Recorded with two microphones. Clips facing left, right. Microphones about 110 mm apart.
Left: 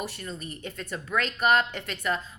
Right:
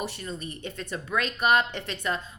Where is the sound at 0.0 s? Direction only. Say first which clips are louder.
Right 2 dB; 20° right (ahead or behind).